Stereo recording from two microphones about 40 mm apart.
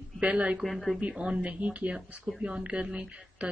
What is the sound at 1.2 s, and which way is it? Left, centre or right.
Speech, right.